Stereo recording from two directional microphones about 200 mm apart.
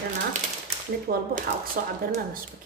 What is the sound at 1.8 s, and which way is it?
Speech, 45° right (ahead or behind).